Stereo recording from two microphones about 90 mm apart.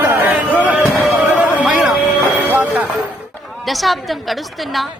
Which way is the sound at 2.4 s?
20° right (ahead or behind).